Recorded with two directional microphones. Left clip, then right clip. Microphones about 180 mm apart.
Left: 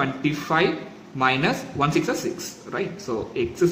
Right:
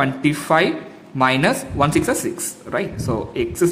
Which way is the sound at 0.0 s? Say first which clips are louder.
Right 5 dB; 35° right (ahead or behind).